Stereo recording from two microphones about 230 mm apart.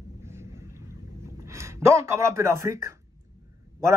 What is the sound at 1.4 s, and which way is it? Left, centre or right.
Speech, centre.